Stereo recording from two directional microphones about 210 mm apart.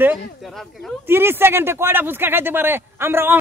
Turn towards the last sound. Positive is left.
turn(degrees=-10)  # may be behind; listen again after turning